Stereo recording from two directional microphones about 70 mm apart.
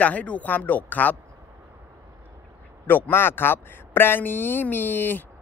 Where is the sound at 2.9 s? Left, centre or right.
Left.